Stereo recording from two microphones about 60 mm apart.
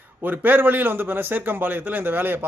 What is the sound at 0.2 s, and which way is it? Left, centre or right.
A man's voice, right.